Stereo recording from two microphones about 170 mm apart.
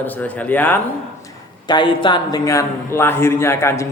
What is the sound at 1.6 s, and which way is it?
A man's voice, 30° left (ahead or behind).